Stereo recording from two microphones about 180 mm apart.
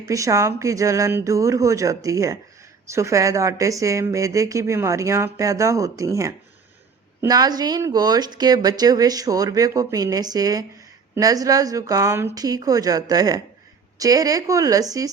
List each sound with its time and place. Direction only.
0.1 s speech: 15° right (ahead or behind)